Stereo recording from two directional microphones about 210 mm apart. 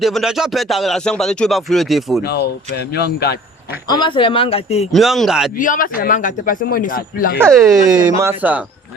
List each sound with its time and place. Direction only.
0.0 s speech: centre (ahead or behind)
2.2 s speech: 50° left (ahead or behind)
3.8 s speech: 20° left (ahead or behind)
4.9 s speech: centre (ahead or behind)
5.5 s speech: 40° left (ahead or behind)
7.6 s speech: 15° right (ahead or behind)